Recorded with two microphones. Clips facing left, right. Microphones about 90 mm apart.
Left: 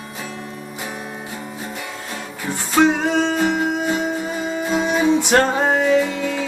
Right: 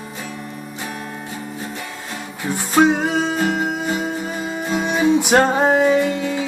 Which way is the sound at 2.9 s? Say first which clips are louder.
Left 1 dB; 5° right (ahead or behind).